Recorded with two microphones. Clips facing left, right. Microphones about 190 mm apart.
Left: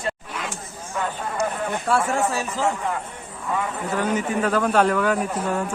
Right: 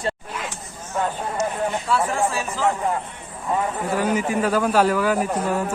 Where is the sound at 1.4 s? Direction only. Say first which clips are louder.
Right 1 dB; 55° left (ahead or behind).